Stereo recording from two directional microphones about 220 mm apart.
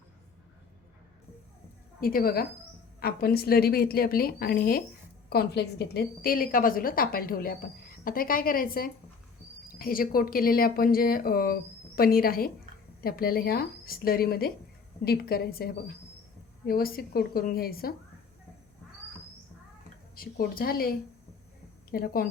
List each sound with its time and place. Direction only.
2.0 s a woman's voice: 40° left (ahead or behind)
20.1 s a woman's voice: 40° left (ahead or behind)
21.9 s a woman's voice: 40° left (ahead or behind)